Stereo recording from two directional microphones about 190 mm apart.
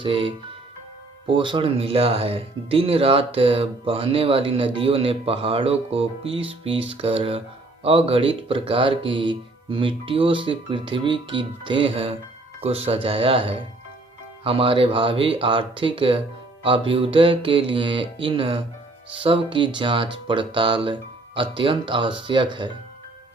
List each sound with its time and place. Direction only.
0.0 s speech: 25° right (ahead or behind)